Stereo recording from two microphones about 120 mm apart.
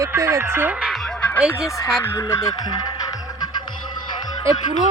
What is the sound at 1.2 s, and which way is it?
Music, 15° left (ahead or behind).